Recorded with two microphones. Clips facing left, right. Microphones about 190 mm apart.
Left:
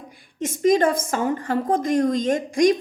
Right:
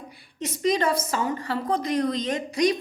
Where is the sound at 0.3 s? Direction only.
50° left (ahead or behind).